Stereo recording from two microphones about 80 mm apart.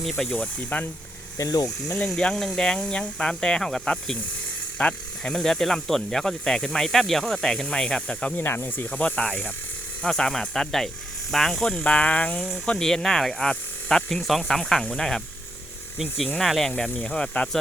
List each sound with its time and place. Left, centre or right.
0.0 s speech: centre
0.3 s speech: left
1.4 s speech: left
2.0 s speech: centre
8.4 s speech: left
8.9 s speech: centre
11.8 s speech: centre